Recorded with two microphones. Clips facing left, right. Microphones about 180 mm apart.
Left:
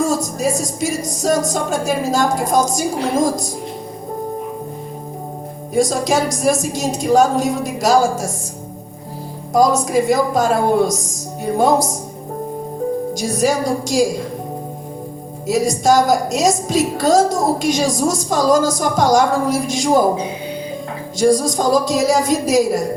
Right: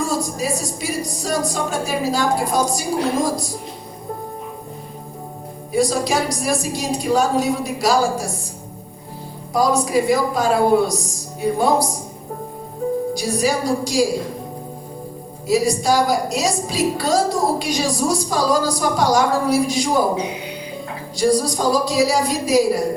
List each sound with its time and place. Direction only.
0.0 s a woman's voice: 45° left (ahead or behind)
5.7 s a woman's voice: 45° left (ahead or behind)
9.5 s a woman's voice: 45° left (ahead or behind)
13.1 s a woman's voice: 45° left (ahead or behind)
15.4 s a woman's voice: 45° left (ahead or behind)
21.2 s a woman's voice: 45° left (ahead or behind)